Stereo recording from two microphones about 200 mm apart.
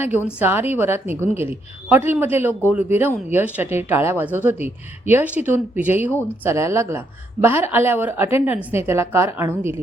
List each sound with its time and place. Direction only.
0.0 s a woman's voice: 10° right (ahead or behind)